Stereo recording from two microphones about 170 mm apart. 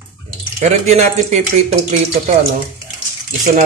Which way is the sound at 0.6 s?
40° right (ahead or behind).